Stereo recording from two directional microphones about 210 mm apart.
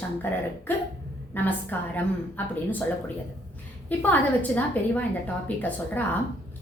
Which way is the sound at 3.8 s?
5° left (ahead or behind).